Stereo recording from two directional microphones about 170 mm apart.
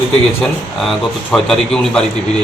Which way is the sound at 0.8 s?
Centre (ahead or behind).